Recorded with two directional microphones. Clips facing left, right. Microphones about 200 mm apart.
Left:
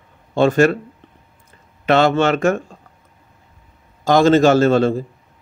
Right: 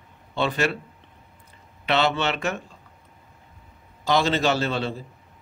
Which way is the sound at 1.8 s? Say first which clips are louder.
Left 8 dB; 45° left (ahead or behind).